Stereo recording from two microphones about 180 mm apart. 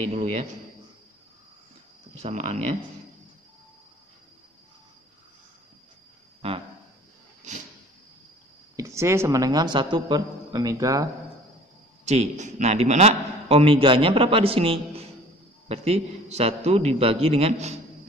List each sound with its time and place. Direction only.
0.1 s a man's voice: 35° right (ahead or behind)
2.2 s a man's voice: 40° right (ahead or behind)
6.4 s a man's voice: 35° right (ahead or behind)
8.7 s a woman's voice: 15° right (ahead or behind)
12.0 s a man's voice: 40° right (ahead or behind)